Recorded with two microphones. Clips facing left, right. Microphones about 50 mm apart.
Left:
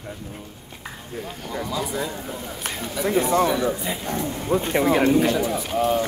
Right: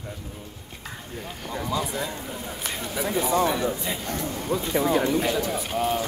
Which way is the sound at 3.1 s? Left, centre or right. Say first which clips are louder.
Left 4 dB; left.